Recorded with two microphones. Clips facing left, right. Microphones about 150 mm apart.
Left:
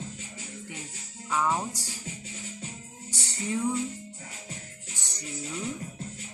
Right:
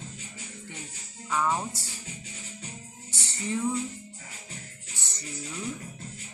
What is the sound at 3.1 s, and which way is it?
Music, 10° left (ahead or behind).